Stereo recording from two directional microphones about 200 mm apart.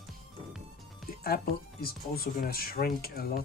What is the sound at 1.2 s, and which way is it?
Speech, 50° left (ahead or behind).